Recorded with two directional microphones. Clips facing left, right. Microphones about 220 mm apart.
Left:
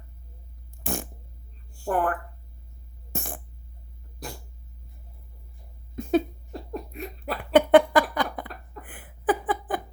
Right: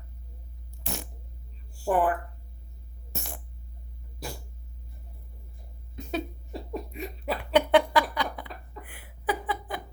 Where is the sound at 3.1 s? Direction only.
50° left (ahead or behind).